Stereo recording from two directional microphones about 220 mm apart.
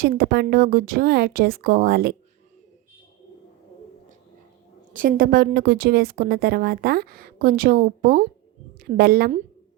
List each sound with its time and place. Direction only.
0.0 s a woman's voice: 45° right (ahead or behind)
4.9 s a woman's voice: 40° right (ahead or behind)